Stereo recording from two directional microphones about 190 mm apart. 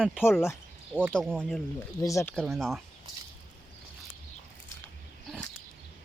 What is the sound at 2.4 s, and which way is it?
Speech, centre (ahead or behind).